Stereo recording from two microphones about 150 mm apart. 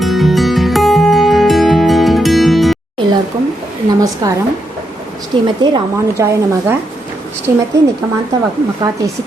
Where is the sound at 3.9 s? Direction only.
25° right (ahead or behind).